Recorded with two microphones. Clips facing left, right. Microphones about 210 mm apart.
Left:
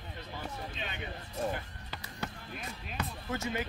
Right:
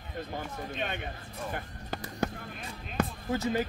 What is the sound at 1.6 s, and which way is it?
Crow, 45° right (ahead or behind).